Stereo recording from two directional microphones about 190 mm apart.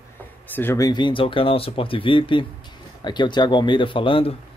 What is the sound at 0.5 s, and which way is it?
Speech, 15° left (ahead or behind).